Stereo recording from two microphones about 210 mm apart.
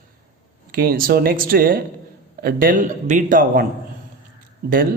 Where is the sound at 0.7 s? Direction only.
45° right (ahead or behind).